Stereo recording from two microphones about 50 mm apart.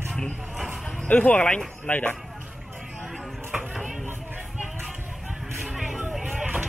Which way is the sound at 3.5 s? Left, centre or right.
Centre.